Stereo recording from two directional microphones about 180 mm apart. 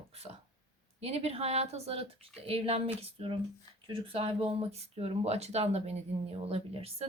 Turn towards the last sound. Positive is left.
turn(degrees=-35)  # may be behind; listen again after turning